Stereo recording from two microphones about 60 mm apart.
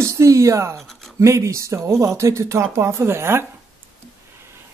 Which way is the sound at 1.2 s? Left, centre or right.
Right.